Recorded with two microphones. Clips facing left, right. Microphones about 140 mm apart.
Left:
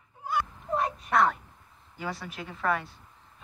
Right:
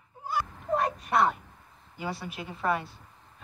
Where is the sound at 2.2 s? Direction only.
15° right (ahead or behind).